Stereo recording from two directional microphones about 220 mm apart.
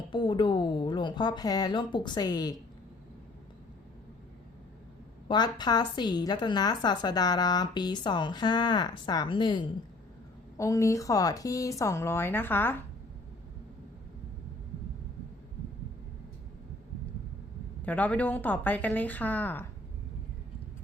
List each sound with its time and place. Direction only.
0.1 s a woman's voice: 20° left (ahead or behind)
5.3 s a woman's voice: 20° left (ahead or behind)
17.8 s a woman's voice: 5° left (ahead or behind)